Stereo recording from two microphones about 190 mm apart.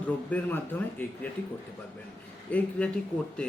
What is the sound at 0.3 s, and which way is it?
Speech, 10° left (ahead or behind).